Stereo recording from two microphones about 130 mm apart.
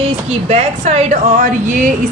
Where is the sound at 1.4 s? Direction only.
85° right.